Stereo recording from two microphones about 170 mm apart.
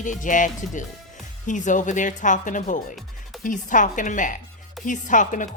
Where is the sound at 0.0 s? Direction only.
50° left (ahead or behind).